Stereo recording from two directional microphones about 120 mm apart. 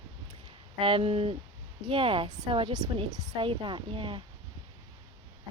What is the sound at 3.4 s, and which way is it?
Speech, 45° right (ahead or behind).